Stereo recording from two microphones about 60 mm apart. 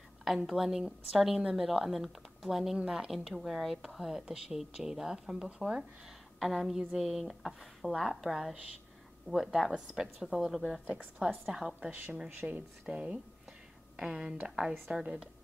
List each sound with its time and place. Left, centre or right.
0.4 s a woman's voice: centre
11.4 s a woman's voice: centre
12.3 s speech: right
12.5 s a woman's voice: centre